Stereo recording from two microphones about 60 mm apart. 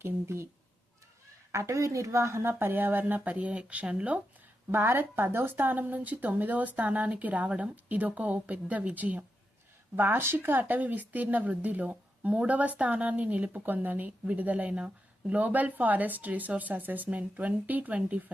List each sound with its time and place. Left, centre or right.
0.0 s speech: right
1.5 s speech: right; by 4.2 s centre
4.7 s speech: right
9.9 s speech: right